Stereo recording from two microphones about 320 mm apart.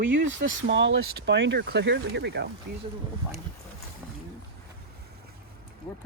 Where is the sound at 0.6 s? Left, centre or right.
Right.